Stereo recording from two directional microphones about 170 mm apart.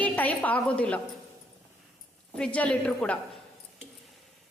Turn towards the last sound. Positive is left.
turn(degrees=5)  # may be behind; listen again after turning